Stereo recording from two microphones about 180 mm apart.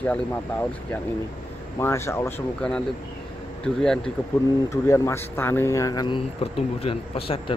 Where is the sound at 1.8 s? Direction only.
15° left (ahead or behind).